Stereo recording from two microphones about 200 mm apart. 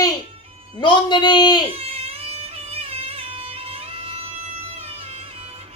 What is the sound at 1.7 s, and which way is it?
Music, 30° right (ahead or behind).